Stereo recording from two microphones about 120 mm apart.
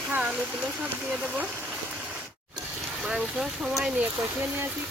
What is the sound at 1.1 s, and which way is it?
Speech, 10° right (ahead or behind).